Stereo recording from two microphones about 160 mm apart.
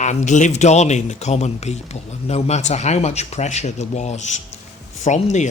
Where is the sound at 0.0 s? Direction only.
50° left (ahead or behind).